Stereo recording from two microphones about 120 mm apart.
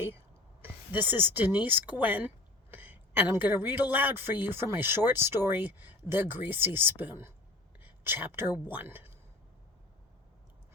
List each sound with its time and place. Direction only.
0.6 s speech: 15° right (ahead or behind)